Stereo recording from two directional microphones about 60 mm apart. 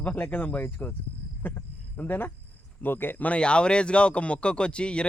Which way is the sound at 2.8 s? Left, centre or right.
Left.